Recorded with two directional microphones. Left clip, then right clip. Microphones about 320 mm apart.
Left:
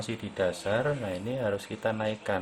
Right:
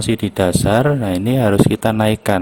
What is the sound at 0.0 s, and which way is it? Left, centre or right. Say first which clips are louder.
Speech: right 13 dB; right.